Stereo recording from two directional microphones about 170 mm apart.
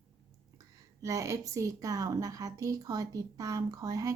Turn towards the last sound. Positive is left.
turn(degrees=-20)  # may be behind; listen again after turning